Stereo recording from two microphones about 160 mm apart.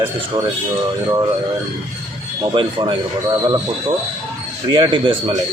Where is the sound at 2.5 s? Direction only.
30° right (ahead or behind).